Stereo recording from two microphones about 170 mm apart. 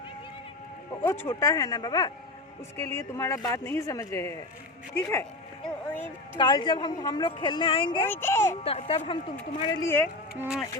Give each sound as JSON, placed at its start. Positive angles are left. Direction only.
{"t": 1.0, "sound": "a woman's voice", "side_deg": 15}
{"t": 6.3, "sound": "a woman's voice", "side_deg": 25}
{"t": 8.1, "sound": "speech", "side_deg": 15}
{"t": 8.6, "sound": "speech", "side_deg": 35}
{"t": 9.6, "sound": "a woman's voice", "side_deg": 25}